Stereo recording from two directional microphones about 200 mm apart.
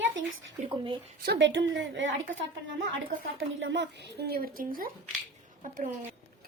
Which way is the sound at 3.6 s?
65° right (ahead or behind).